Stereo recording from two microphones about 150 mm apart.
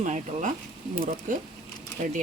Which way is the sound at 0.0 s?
55° right (ahead or behind).